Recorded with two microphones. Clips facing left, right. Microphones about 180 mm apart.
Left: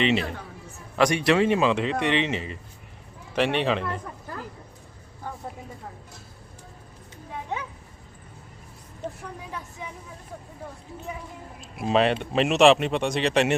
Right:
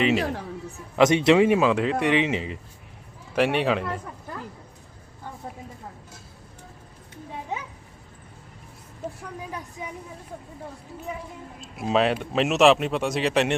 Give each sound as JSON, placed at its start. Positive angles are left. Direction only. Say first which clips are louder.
{"t": 0.9, "sound": "a man's voice", "louder": "right 4 dB", "side_deg": -20}
{"t": 1.5, "sound": "speech", "louder": "right 2 dB", "side_deg": -5}
{"t": 11.6, "sound": "a sound", "louder": "even", "side_deg": 0}
{"t": 12.2, "sound": "speech", "louder": "left 1 dB", "side_deg": 0}